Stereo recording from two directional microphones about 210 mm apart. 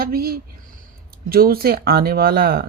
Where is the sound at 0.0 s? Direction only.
45° right (ahead or behind).